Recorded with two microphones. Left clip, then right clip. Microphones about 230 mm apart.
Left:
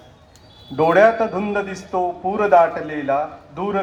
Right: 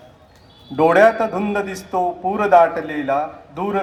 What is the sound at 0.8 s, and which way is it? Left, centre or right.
A man's voice, right.